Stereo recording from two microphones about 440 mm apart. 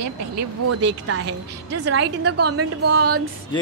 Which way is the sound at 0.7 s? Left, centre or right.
Right.